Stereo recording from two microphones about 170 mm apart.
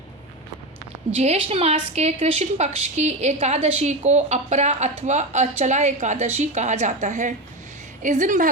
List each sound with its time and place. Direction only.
1.2 s a woman's voice: 35° right (ahead or behind)